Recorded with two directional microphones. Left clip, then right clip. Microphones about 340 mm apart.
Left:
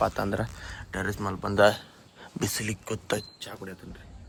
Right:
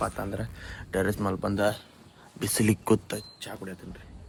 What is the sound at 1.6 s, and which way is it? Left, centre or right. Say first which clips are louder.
Speech: left 8 dB; left.